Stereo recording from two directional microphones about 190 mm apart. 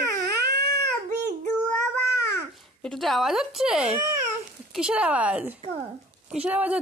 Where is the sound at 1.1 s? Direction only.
45° right (ahead or behind).